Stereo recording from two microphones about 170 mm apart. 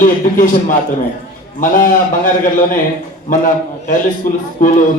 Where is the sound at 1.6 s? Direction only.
50° left (ahead or behind).